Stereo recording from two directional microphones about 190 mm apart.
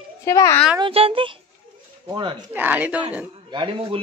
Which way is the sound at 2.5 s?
10° right (ahead or behind).